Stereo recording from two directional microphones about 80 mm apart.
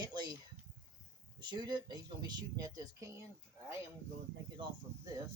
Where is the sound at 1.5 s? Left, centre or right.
Right.